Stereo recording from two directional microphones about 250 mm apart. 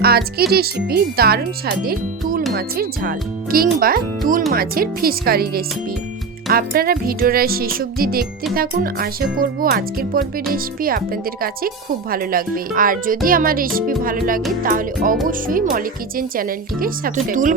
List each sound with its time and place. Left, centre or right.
0.0 s speech: right